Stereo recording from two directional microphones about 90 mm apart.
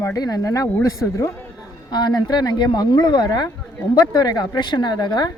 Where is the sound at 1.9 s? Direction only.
50° left (ahead or behind).